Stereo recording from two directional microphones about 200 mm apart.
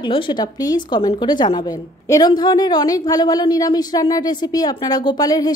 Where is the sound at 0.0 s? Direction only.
20° left (ahead or behind).